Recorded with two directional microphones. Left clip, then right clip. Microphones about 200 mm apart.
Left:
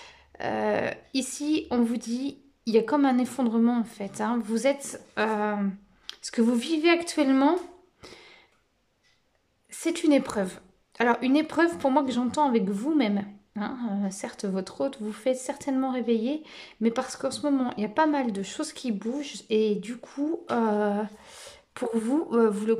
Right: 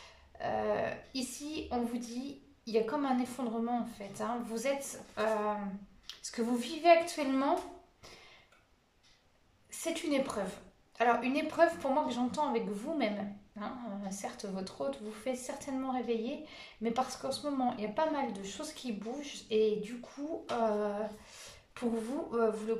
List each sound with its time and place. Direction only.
0.4 s a woman's voice: 50° left (ahead or behind)
9.7 s a woman's voice: 50° left (ahead or behind)